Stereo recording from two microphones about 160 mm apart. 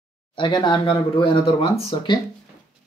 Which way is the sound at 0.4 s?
30° left (ahead or behind).